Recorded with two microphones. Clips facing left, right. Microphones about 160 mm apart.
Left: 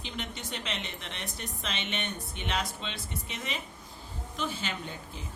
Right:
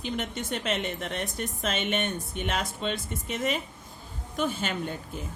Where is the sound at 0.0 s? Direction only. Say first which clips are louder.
Right 7 dB; 50° right (ahead or behind).